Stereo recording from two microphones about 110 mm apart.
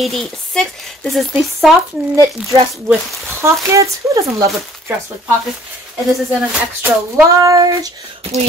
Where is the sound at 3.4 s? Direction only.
25° right (ahead or behind).